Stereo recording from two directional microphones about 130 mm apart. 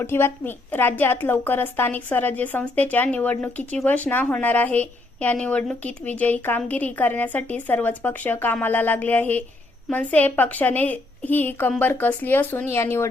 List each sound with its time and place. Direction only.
0.0 s a woman's voice: 20° left (ahead or behind)